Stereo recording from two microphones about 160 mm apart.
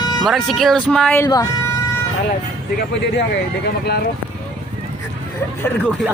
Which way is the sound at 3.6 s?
90° left.